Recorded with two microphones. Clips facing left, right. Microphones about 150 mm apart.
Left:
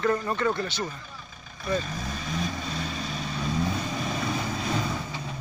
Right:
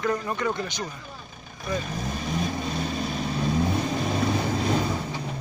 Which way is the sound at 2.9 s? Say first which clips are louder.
Right 5 dB; 50° right (ahead or behind).